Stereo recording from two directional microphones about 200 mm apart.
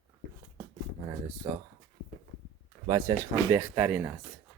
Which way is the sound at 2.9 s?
15° right (ahead or behind).